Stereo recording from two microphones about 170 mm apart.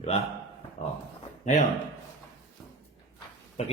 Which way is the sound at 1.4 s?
45° left (ahead or behind).